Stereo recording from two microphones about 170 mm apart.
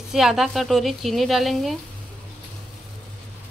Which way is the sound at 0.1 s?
5° right (ahead or behind).